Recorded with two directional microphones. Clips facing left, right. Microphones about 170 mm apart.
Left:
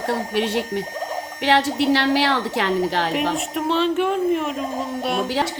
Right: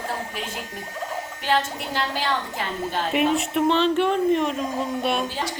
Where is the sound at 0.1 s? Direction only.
75° left (ahead or behind); by 3.1 s 90° left.